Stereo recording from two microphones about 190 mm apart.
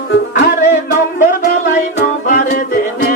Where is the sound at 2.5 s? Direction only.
50° left (ahead or behind).